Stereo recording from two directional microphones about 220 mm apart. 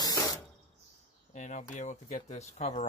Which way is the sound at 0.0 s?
15° left (ahead or behind).